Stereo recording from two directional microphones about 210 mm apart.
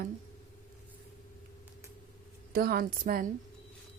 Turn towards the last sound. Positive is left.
turn(degrees=-40)  # may be behind; listen again after turning